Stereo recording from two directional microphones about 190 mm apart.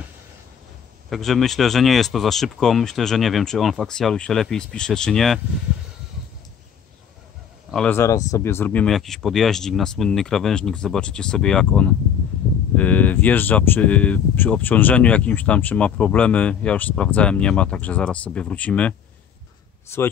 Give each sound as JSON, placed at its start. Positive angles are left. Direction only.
{"t": 1.1, "sound": "speech", "side_deg": 0}
{"t": 7.7, "sound": "speech", "side_deg": 10}